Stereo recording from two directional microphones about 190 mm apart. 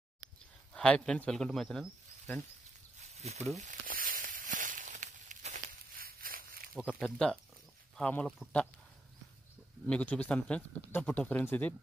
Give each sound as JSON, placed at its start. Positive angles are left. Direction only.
{"t": 0.7, "sound": "speech", "side_deg": 5}
{"t": 3.0, "sound": "a sound", "side_deg": -35}
{"t": 7.0, "sound": "speech", "side_deg": 5}
{"t": 9.8, "sound": "speech", "side_deg": 5}